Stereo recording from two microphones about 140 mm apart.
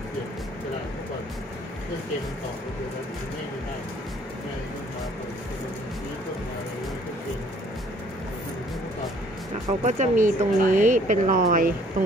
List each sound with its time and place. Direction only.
9.8 s speech: 65° right (ahead or behind); by 11.7 s 80° right